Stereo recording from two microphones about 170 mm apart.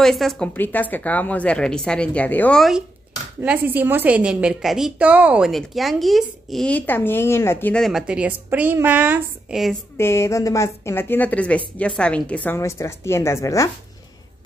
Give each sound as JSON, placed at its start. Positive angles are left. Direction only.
{"t": 0.0, "sound": "speech", "side_deg": 0}
{"t": 3.3, "sound": "a woman's voice", "side_deg": -10}
{"t": 9.9, "sound": "speech", "side_deg": 15}